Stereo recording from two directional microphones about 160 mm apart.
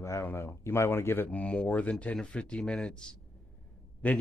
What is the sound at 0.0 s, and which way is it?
Speech, 15° left (ahead or behind).